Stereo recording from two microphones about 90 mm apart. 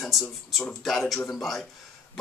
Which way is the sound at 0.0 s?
Centre (ahead or behind).